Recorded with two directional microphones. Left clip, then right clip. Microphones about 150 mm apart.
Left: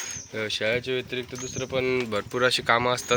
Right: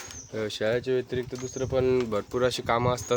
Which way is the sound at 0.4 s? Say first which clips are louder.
Left 1 dB; 35° right (ahead or behind).